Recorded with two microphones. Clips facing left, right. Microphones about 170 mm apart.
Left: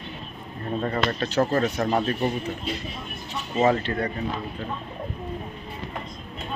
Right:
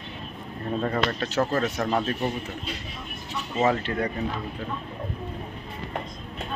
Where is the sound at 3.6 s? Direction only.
Centre (ahead or behind).